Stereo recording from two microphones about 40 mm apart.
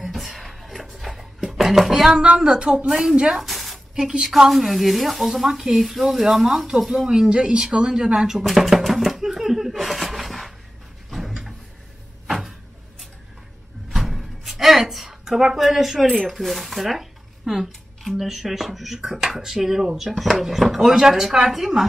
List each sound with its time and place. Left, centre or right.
0.0 s a sound: centre
2.3 s speech: centre
2.9 s speech: centre
3.3 s a sound: centre
3.9 s a woman's voice: centre
4.3 s speech: centre
7.1 s speech: right
7.7 s chopping: centre
11.1 s a sound: centre
13.8 s door: centre
15.0 s speech: centre